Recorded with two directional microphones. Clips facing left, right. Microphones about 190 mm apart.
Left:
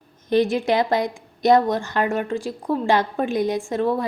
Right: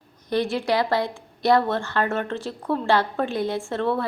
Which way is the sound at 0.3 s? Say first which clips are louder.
Left 4 dB; 20° left (ahead or behind).